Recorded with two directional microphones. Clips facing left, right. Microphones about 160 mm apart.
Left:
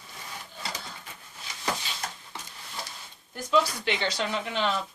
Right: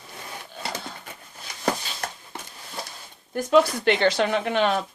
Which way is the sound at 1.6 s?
55° right (ahead or behind).